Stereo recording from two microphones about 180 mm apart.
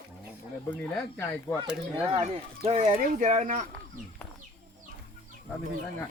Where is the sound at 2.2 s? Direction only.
35° right (ahead or behind).